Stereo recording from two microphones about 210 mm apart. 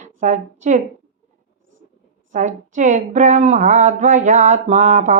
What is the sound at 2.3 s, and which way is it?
Speech, 35° right (ahead or behind).